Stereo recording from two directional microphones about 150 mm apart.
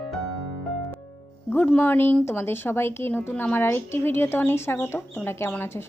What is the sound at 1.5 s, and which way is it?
Speech, 10° left (ahead or behind).